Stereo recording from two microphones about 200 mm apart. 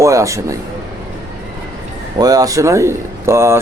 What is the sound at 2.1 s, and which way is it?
Speech, 20° right (ahead or behind).